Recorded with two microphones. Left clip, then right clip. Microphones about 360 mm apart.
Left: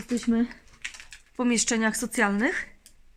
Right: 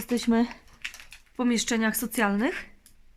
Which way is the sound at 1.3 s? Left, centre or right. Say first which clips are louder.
Left 1 dB; centre.